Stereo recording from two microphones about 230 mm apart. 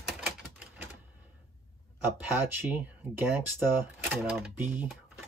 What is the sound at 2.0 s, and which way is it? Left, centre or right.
Speech, centre.